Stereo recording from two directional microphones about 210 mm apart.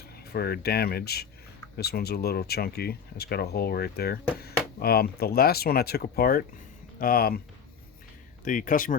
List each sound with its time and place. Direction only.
0.0 s speech: 50° left (ahead or behind)
8.4 s speech: 40° left (ahead or behind)